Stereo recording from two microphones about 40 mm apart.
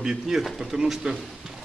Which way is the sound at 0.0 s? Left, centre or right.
Centre.